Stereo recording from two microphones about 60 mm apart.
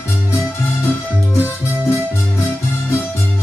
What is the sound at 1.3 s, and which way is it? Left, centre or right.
Music, left.